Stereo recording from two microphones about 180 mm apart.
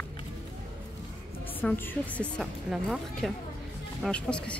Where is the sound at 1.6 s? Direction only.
5° left (ahead or behind).